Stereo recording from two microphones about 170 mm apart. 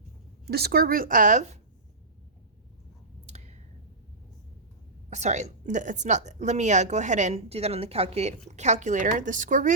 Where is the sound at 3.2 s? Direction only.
40° right (ahead or behind).